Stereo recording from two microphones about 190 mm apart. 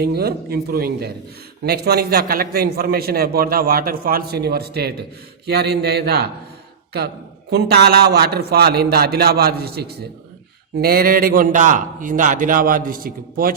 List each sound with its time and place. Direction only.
0.0 s a man's voice: 55° right (ahead or behind)
7.5 s a man's voice: 55° right (ahead or behind)